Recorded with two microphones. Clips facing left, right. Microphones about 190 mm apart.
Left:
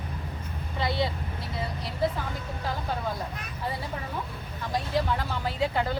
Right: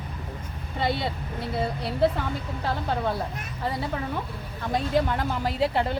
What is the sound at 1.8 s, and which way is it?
Speech, 65° right (ahead or behind).